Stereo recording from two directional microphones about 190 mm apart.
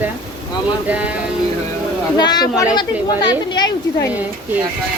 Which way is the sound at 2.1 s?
20° left (ahead or behind).